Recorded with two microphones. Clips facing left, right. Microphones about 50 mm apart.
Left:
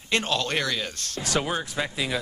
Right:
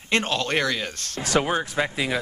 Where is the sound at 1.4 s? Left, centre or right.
Right.